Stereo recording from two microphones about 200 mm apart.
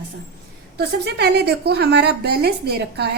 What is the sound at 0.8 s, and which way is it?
A woman's voice, 55° right (ahead or behind).